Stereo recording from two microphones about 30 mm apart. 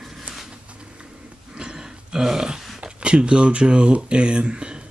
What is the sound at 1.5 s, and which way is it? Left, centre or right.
Grunt, right.